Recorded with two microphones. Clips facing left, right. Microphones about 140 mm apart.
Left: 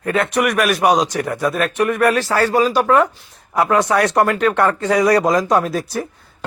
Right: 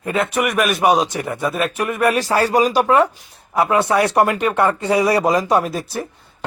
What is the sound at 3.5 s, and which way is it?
A man's voice, 5° right (ahead or behind).